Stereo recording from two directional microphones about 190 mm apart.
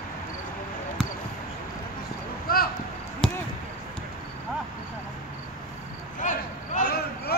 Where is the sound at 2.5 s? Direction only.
50° left (ahead or behind).